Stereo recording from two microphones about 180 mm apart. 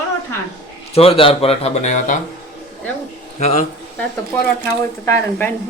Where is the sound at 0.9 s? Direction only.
30° left (ahead or behind).